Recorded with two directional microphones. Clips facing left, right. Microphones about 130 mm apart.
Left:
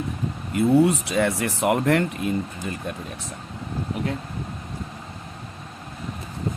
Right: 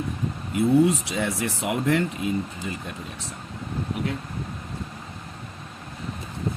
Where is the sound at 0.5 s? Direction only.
60° left (ahead or behind).